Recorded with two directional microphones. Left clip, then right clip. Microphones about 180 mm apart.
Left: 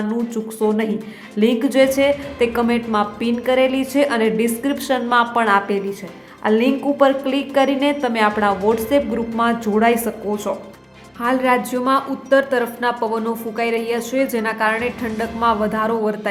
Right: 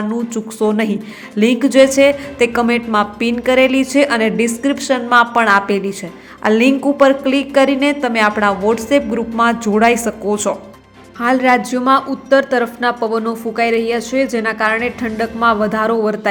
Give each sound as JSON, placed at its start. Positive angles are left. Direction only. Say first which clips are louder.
{"t": 0.1, "sound": "a woman's voice", "louder": "right 2 dB", "side_deg": -15}